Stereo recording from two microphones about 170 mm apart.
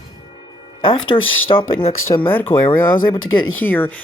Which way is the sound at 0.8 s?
30° left (ahead or behind).